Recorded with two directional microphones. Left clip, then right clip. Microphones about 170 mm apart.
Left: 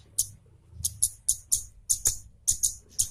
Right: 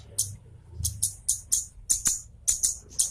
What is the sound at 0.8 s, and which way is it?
Music, 30° left (ahead or behind).